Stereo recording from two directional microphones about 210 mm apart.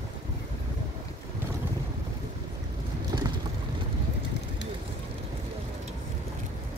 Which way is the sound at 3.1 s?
15° right (ahead or behind).